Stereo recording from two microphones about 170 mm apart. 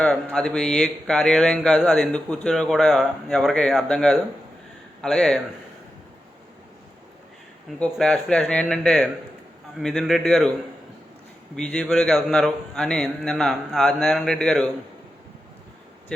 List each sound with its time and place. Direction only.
0.0 s a man's voice: 5° left (ahead or behind)
7.9 s a man's voice: 5° left (ahead or behind)
11.5 s a man's voice: 5° left (ahead or behind)